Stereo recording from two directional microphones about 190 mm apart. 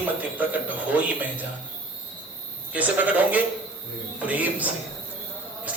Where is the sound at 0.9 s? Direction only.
10° right (ahead or behind).